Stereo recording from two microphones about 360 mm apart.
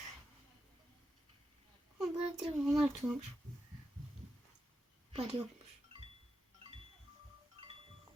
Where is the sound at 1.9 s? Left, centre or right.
Centre.